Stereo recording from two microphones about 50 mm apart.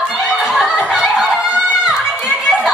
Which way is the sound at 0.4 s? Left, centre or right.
Centre.